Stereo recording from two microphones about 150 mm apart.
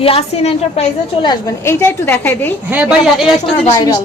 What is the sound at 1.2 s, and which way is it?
A woman's voice, 20° left (ahead or behind).